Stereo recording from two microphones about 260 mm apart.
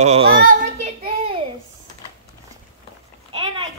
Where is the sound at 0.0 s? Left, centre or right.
Right.